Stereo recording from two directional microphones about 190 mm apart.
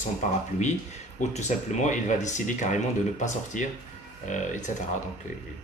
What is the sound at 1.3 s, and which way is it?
Speech, 35° left (ahead or behind).